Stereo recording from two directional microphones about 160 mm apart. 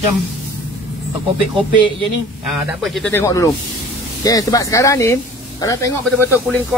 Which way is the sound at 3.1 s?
15° left (ahead or behind).